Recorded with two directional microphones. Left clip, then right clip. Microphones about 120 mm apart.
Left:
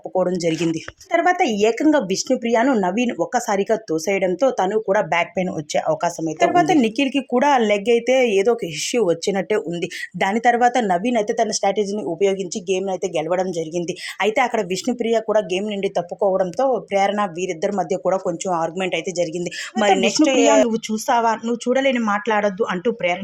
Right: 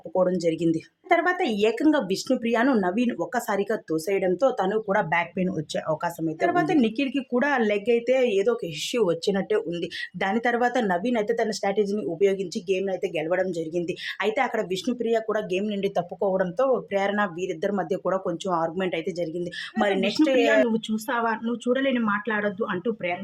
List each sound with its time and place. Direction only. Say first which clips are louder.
0.2 s speech: left 3 dB; 25° left (ahead or behind)
5.1 s speech: left 5 dB; 30° left (ahead or behind); by 19.2 s 10° left (ahead or behind)
20.2 s speech: left 4 dB; 15° left (ahead or behind)
20.7 s speech: left 4 dB; 5° right (ahead or behind)
21.1 s speech: left 8 dB; 25° left (ahead or behind)
22.3 s speech: left 7 dB; 35° left (ahead or behind)